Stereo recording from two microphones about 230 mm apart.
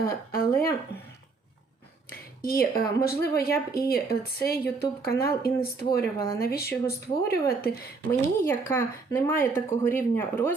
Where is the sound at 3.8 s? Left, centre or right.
Left.